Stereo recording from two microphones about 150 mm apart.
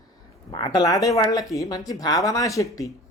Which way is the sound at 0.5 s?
30° left (ahead or behind).